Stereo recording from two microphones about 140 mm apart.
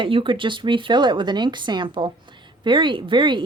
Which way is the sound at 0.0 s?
35° right (ahead or behind).